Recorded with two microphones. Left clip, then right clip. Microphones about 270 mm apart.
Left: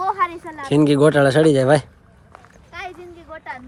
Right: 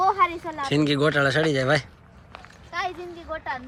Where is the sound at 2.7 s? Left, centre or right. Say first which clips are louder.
Right 4 dB; centre.